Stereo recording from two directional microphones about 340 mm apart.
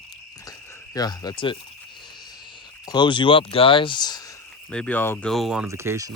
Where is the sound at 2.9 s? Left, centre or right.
Centre.